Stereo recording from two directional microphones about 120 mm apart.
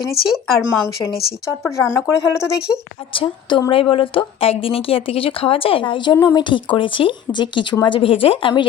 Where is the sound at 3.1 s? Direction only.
45° left (ahead or behind).